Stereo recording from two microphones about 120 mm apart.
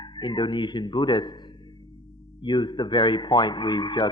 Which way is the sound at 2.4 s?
40° left (ahead or behind).